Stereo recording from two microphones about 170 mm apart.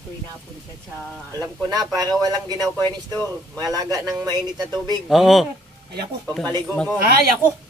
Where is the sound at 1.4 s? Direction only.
20° right (ahead or behind).